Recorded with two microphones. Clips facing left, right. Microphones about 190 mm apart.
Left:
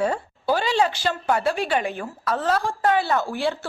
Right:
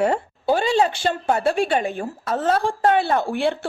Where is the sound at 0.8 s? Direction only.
25° right (ahead or behind).